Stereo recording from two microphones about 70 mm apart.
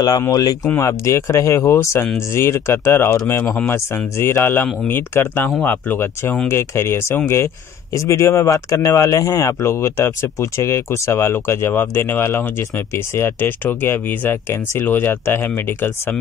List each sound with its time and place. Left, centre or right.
0.3 s speech: left
0.7 s speech: left